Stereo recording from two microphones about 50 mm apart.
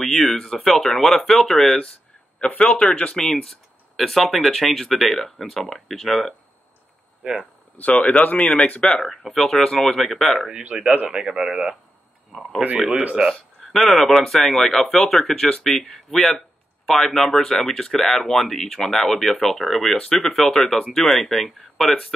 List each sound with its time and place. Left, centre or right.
0.4 s speech: centre
2.4 s speech: left
3.4 s speech: centre
7.7 s speech: left
9.3 s speech: centre
10.7 s speech: centre
12.3 s speech: centre
12.6 s speech: right
13.7 s speech: centre
20.0 s speech: centre
20.2 s speech: centre